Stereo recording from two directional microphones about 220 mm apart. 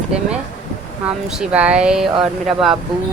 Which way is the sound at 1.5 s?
5° right (ahead or behind).